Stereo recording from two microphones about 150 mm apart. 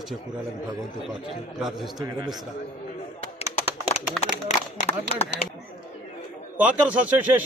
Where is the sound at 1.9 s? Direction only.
25° right (ahead or behind).